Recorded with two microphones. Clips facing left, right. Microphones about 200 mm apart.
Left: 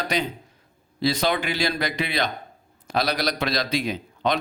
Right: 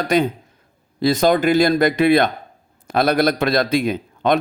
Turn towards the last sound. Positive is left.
turn(degrees=-50)  # may be behind; listen again after turning